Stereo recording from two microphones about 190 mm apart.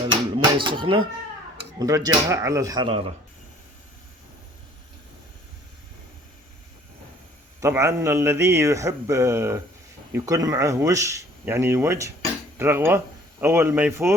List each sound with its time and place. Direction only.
0.3 s a sound: 25° right (ahead or behind)
1.8 s speech: 20° right (ahead or behind)
7.6 s speech: 15° right (ahead or behind)